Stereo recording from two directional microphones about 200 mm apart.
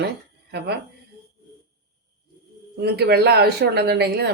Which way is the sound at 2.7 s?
55° right (ahead or behind).